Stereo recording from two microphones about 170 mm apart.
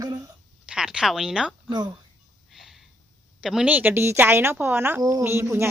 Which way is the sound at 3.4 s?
5° right (ahead or behind).